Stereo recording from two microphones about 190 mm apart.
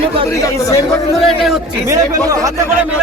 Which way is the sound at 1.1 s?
Centre (ahead or behind).